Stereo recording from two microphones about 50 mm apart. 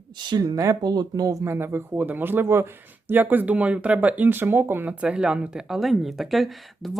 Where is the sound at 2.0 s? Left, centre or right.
Right.